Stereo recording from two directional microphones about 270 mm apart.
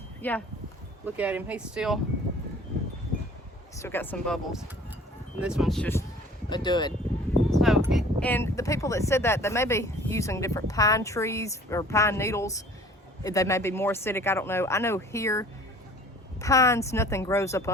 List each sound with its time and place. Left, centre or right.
0.2 s speech: centre
1.0 s speech: centre
3.8 s speech: centre
7.5 s speech: centre